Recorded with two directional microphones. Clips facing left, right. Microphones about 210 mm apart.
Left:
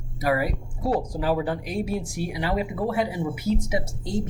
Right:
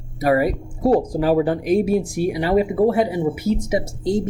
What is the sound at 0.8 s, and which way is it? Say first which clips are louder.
Speech: right 8 dB; 50° right (ahead or behind).